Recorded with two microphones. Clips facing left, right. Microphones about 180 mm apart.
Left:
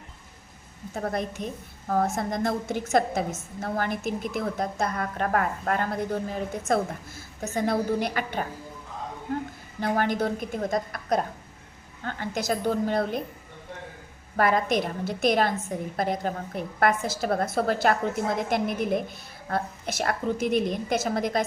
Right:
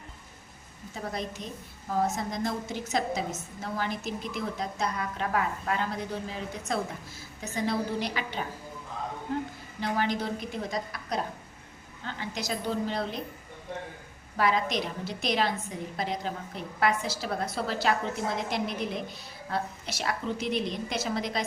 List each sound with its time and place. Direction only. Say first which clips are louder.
0.9 s a woman's voice: left 6 dB; 55° left (ahead or behind)
9.8 s a woman's voice: left 4 dB; 50° left (ahead or behind)
14.3 s a woman's voice: left 4 dB; 50° left (ahead or behind)